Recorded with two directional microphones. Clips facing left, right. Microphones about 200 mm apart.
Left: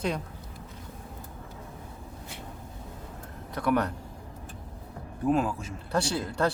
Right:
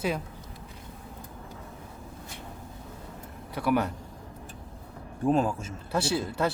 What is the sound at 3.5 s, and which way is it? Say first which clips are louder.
Speech: even; 5° right (ahead or behind).